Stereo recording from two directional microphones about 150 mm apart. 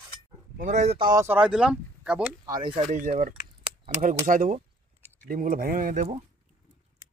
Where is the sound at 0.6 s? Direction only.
50° right (ahead or behind).